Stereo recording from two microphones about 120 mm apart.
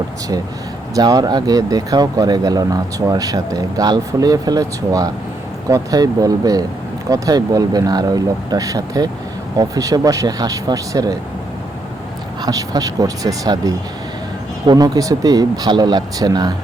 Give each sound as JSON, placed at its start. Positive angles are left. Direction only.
{"t": 0.9, "sound": "speech", "side_deg": -30}
{"t": 12.4, "sound": "speech", "side_deg": -30}